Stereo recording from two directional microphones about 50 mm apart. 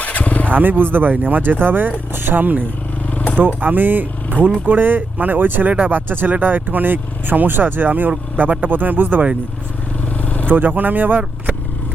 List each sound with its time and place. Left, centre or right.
0.0 s vehicle: left
0.5 s speech: right
3.1 s vehicle: left
3.3 s speech: right
10.2 s vehicle: left
10.5 s speech: right